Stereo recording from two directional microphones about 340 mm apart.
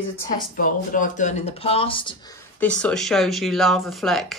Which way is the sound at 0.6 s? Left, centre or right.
Left.